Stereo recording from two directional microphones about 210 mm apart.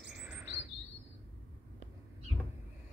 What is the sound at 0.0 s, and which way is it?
Bird, 5° right (ahead or behind).